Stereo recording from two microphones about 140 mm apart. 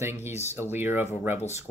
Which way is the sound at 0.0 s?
15° right (ahead or behind).